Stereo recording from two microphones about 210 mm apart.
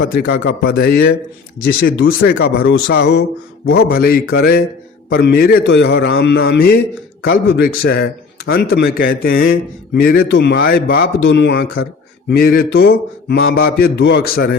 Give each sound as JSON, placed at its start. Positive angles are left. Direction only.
{"t": 0.0, "sound": "mantra", "side_deg": 50}
{"t": 12.3, "sound": "mantra", "side_deg": 45}